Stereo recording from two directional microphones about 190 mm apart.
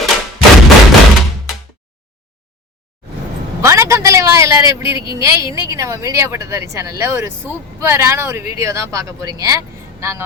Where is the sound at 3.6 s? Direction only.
15° right (ahead or behind).